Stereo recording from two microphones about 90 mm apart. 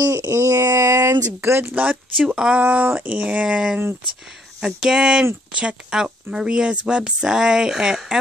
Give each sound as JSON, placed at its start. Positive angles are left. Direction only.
{"t": 0.0, "sound": "a sound", "side_deg": -35}
{"t": 1.4, "sound": "speech", "side_deg": -25}
{"t": 2.2, "sound": "speech", "side_deg": -10}
{"t": 2.6, "sound": "speech", "side_deg": -20}